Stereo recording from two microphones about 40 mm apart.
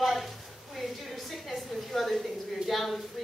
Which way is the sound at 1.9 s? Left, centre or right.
Centre.